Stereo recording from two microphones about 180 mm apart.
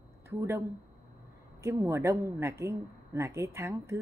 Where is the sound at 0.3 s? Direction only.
15° right (ahead or behind).